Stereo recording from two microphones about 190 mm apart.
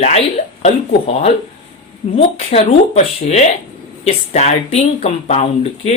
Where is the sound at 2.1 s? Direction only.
30° left (ahead or behind).